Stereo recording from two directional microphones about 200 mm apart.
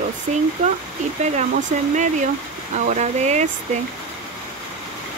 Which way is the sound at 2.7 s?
35° right (ahead or behind).